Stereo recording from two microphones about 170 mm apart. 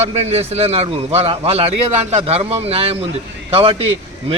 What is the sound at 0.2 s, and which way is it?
A man's voice, 40° right (ahead or behind).